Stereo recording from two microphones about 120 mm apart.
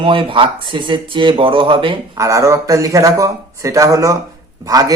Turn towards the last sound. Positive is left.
turn(degrees=-30)  # may be behind; listen again after turning